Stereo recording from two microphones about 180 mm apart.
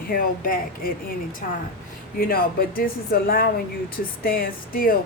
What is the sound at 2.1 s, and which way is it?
A woman's voice, 55° left (ahead or behind).